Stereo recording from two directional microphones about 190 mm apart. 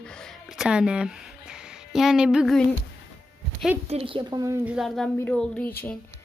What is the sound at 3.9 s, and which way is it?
Speech, 30° right (ahead or behind).